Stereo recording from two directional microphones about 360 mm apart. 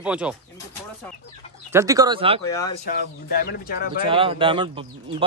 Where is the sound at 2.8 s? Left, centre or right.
Left.